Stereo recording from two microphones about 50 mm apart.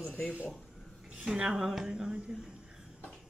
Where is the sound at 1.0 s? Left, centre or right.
Centre.